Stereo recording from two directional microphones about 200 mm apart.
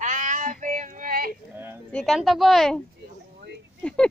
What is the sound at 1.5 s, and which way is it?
Speech, 10° right (ahead or behind).